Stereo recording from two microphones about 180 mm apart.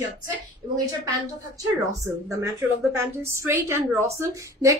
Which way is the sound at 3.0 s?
15° right (ahead or behind).